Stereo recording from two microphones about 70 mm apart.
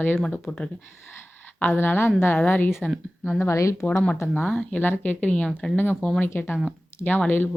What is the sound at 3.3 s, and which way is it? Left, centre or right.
Speech, left.